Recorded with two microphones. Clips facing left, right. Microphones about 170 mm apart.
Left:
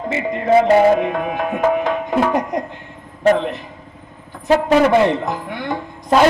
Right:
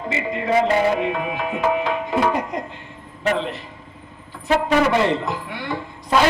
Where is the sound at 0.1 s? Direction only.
50° left (ahead or behind).